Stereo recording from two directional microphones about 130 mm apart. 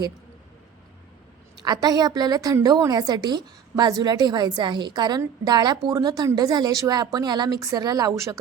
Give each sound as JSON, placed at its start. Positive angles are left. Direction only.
{"t": 1.6, "sound": "a woman's voice", "side_deg": -30}